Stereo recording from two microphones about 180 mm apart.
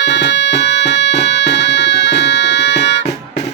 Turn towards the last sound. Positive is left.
turn(degrees=75)  # may be behind; listen again after turning